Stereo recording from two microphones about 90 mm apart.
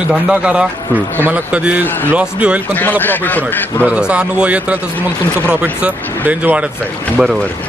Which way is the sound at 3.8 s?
10° right (ahead or behind).